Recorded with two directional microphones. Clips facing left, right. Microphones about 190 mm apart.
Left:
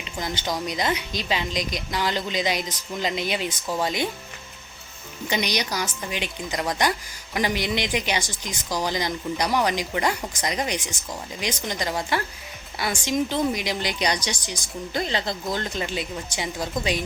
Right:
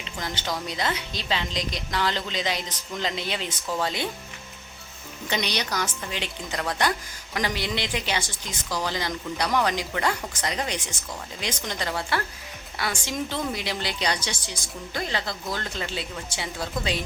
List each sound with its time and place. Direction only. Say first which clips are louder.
0.0 s speech: left 3 dB; 15° left (ahead or behind)
5.3 s speech: left 2 dB; 10° left (ahead or behind)